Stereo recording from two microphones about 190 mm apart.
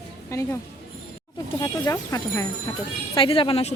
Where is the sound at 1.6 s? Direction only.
20° left (ahead or behind).